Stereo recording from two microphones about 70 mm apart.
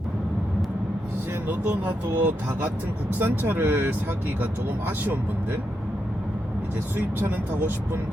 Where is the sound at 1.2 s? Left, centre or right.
Right.